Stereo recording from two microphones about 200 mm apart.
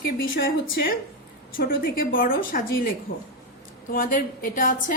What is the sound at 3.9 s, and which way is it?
A woman's voice, 45° left (ahead or behind).